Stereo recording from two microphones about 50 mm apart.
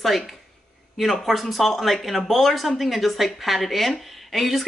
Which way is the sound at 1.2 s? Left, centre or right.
Centre.